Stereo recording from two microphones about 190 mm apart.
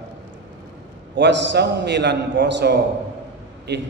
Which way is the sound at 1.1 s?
65° right (ahead or behind).